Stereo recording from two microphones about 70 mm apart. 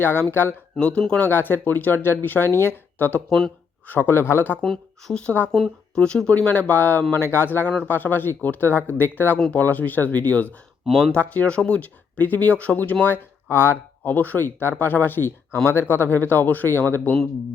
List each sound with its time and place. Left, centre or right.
0.0 s speech: left
0.8 s speech: centre
1.3 s speech: left
4.6 s speech: centre
6.0 s speech: centre